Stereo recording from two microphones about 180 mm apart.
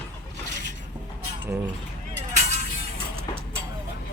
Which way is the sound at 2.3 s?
40° right (ahead or behind).